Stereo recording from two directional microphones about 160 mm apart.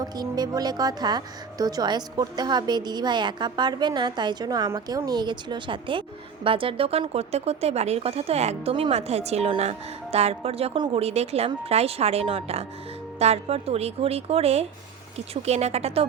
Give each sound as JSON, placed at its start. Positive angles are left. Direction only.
{"t": 0.0, "sound": "speech", "side_deg": -25}